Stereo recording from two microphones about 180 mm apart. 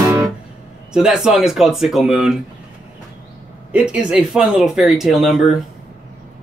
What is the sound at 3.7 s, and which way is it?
Speech, 5° right (ahead or behind).